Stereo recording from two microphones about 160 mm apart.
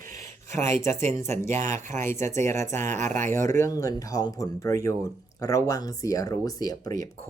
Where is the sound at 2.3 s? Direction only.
15° left (ahead or behind).